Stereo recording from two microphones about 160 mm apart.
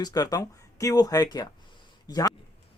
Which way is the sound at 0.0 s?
25° left (ahead or behind).